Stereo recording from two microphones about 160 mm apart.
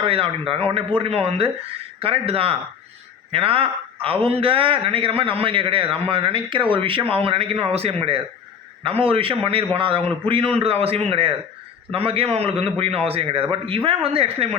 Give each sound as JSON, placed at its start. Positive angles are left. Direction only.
{"t": 0.0, "sound": "a man's voice", "side_deg": -35}